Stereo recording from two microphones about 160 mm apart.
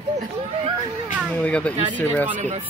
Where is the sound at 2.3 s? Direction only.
45° right (ahead or behind).